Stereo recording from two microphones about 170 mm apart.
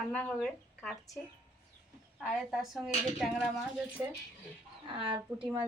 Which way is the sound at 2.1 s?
Centre (ahead or behind).